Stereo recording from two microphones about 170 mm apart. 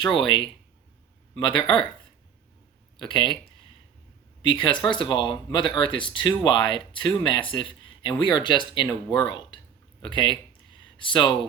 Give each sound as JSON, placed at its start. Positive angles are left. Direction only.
{"t": 0.0, "sound": "speech", "side_deg": 30}
{"t": 1.5, "sound": "speech", "side_deg": 30}
{"t": 3.0, "sound": "speech", "side_deg": 30}
{"t": 4.4, "sound": "speech", "side_deg": 30}